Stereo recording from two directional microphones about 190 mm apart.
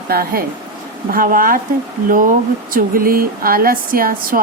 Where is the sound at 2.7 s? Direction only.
50° right (ahead or behind).